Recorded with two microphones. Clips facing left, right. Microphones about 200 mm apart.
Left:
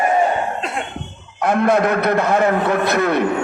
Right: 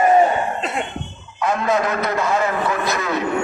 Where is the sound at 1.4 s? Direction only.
60° left (ahead or behind).